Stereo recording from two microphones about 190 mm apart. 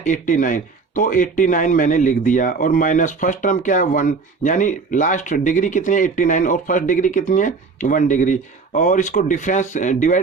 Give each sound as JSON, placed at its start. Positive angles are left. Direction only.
{"t": 0.0, "sound": "speech", "side_deg": 40}